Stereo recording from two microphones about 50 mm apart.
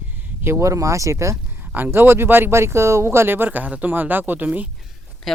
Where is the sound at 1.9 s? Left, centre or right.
Right.